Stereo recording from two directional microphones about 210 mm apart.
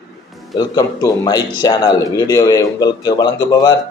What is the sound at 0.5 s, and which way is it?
Speech, 20° left (ahead or behind).